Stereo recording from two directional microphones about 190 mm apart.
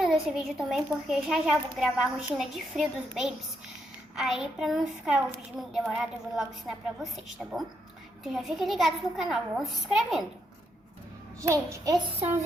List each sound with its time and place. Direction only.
0.0 s a child's voice: centre (ahead or behind)
11.3 s a child's voice: 15° right (ahead or behind)